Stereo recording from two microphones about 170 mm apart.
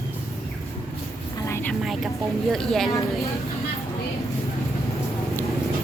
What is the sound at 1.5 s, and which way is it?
Vehicle, 10° left (ahead or behind).